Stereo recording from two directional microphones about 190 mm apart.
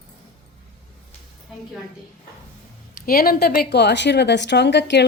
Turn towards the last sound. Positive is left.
turn(degrees=60)  # may be behind; listen again after turning